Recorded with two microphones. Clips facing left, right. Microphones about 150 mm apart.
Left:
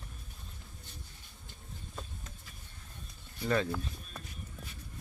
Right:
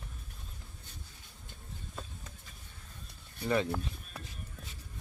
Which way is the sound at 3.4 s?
20° right (ahead or behind).